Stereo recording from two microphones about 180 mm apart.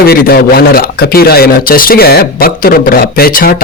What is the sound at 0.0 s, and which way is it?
Speech, 55° left (ahead or behind).